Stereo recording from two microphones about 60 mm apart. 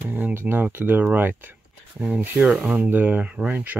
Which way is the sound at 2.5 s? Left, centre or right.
Centre.